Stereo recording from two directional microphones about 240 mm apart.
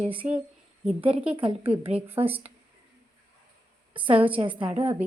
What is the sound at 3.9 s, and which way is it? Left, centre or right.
Speech, right.